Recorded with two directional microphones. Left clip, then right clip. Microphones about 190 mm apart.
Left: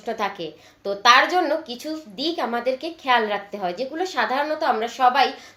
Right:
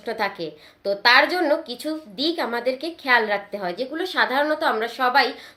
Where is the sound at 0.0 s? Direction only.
20° right (ahead or behind).